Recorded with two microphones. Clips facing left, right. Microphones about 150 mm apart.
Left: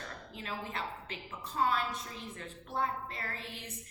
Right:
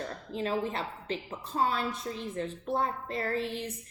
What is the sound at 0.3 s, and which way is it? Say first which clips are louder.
A woman's voice: right 9 dB; 30° right (ahead or behind).